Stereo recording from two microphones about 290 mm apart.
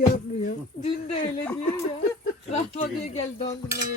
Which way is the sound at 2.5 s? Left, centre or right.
Left.